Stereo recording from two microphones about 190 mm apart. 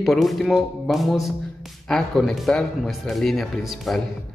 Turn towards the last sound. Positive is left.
turn(degrees=0)  # may be behind; listen again after turning